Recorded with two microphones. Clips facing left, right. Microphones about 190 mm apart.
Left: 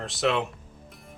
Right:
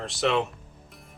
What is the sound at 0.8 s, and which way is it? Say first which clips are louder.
Music: left 5 dB; centre (ahead or behind).